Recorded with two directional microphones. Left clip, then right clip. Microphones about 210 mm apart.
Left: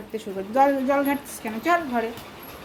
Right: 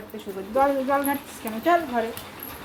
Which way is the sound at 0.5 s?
40° left (ahead or behind).